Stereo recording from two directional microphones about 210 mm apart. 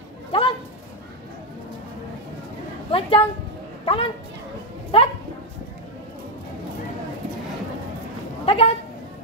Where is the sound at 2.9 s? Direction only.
25° left (ahead or behind).